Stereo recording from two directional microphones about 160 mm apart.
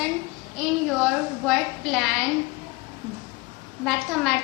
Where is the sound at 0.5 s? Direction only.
Centre (ahead or behind).